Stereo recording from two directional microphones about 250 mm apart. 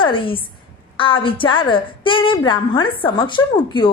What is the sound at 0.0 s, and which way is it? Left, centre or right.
A woman's voice, centre.